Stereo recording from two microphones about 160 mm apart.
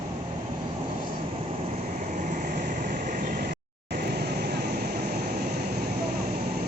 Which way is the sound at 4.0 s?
80° right.